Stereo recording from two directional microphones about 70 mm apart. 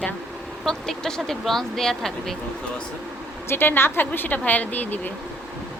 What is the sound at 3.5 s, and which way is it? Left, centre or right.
Speech, left.